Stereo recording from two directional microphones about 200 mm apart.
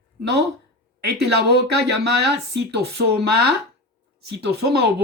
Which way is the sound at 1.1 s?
55° right (ahead or behind).